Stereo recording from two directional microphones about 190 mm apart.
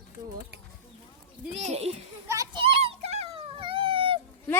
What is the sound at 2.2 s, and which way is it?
Children playing, 15° right (ahead or behind).